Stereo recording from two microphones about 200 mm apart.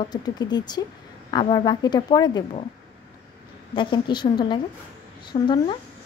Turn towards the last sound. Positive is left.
turn(degrees=20)  # may be behind; listen again after turning